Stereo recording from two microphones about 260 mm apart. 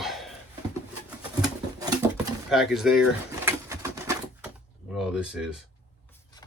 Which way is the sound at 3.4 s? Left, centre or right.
Centre.